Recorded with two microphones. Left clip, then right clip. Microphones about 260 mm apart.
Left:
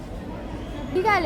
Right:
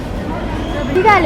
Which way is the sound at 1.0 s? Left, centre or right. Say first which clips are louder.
Right 10 dB; centre.